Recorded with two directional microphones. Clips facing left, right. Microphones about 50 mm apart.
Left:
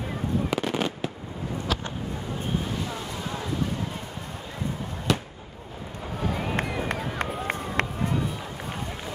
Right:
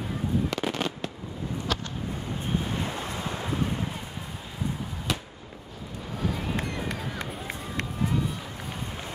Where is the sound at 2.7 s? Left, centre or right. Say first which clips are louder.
Even; right.